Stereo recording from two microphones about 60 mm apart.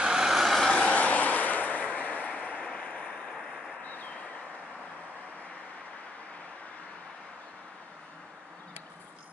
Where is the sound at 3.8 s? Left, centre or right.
Left.